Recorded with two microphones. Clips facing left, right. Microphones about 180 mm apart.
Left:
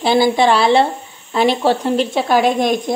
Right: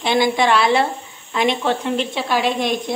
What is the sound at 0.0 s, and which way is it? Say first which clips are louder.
Speech: left 4 dB; 35° left (ahead or behind).